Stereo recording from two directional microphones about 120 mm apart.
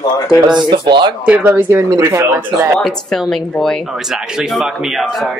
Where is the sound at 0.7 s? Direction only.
40° right (ahead or behind).